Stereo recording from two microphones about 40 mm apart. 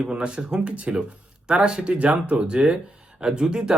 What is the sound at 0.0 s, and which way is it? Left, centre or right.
Speech, right.